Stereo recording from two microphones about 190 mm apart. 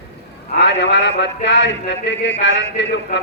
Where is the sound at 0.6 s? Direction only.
70° left (ahead or behind).